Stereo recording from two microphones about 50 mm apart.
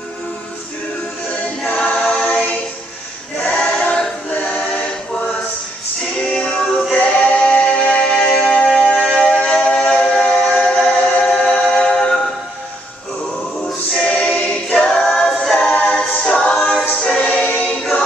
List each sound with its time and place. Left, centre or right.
1.7 s choir: left
6.1 s a capella: left
8.7 s a sound: centre
14.1 s choir: left
14.9 s choir: centre
15.5 s a capella: left
17.0 s music: centre
17.3 s choir: left